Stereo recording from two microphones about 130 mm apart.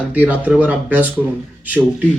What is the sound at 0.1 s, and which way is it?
A man's voice, 10° right (ahead or behind).